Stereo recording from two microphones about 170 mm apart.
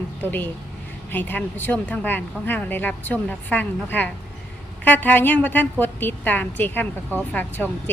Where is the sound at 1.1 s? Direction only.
10° left (ahead or behind).